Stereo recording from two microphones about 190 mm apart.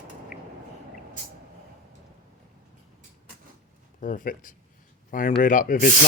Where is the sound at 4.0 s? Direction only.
45° left (ahead or behind).